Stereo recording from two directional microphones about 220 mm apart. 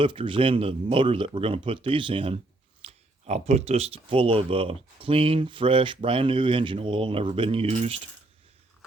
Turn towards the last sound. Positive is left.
turn(degrees=-30)  # may be behind; listen again after turning